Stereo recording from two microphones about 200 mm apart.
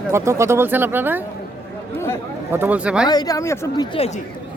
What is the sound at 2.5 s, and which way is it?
Speech, 10° right (ahead or behind).